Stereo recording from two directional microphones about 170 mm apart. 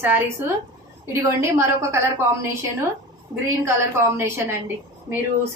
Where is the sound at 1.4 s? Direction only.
15° right (ahead or behind).